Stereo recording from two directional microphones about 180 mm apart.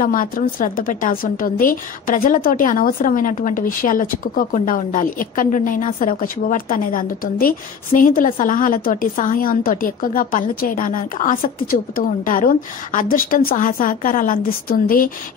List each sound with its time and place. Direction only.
0.0 s a woman's voice: 50° left (ahead or behind)